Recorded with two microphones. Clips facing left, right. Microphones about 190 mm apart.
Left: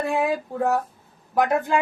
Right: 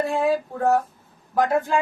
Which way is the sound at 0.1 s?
15° left (ahead or behind).